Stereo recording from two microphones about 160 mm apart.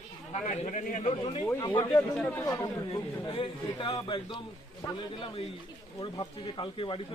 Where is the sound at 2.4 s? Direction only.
20° left (ahead or behind).